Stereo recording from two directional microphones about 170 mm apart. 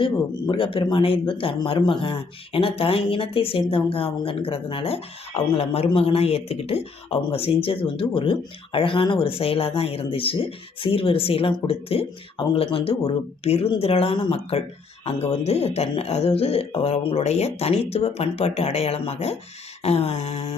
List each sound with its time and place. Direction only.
0.0 s speech: 30° left (ahead or behind)